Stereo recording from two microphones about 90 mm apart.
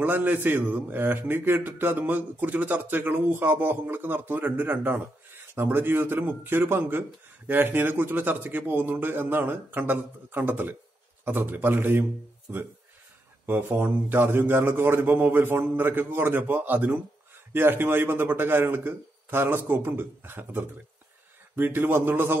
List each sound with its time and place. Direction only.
0.0 s a man's voice: 20° right (ahead or behind)